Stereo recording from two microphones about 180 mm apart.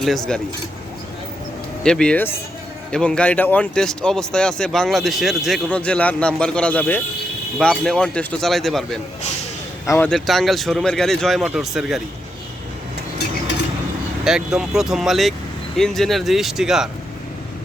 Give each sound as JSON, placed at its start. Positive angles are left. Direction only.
{"t": 0.3, "sound": "speech", "side_deg": 5}
{"t": 1.8, "sound": "speech", "side_deg": 5}
{"t": 9.8, "sound": "speech", "side_deg": 15}
{"t": 10.1, "sound": "speech", "side_deg": 0}
{"t": 14.3, "sound": "speech", "side_deg": -5}